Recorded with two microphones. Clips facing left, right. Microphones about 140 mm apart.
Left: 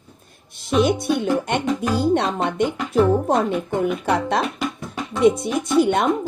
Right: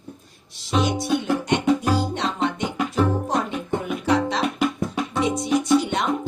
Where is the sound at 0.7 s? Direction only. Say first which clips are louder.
Left 3 dB; 55° left (ahead or behind).